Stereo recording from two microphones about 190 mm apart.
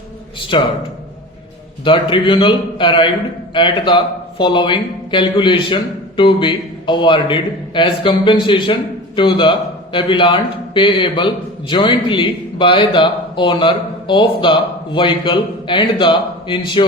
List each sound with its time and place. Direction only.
1.8 s speech: 25° left (ahead or behind)